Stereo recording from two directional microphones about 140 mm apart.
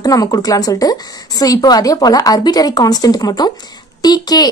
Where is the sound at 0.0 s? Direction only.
25° left (ahead or behind).